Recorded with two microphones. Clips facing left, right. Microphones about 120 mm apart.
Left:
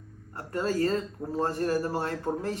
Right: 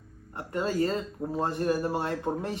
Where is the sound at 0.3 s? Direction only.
20° right (ahead or behind).